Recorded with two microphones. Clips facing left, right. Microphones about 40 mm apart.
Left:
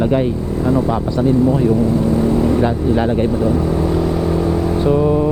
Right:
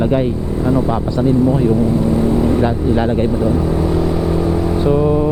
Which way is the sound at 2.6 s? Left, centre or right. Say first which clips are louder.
Even; centre.